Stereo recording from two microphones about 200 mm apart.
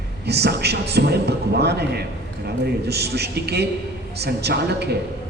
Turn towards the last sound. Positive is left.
turn(degrees=-55)  # may be behind; listen again after turning